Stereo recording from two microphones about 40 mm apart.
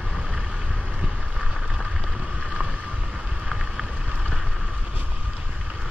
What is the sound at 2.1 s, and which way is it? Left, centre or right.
Boat, right.